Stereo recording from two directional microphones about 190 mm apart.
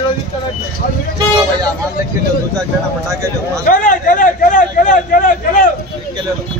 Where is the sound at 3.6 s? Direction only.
45° left (ahead or behind).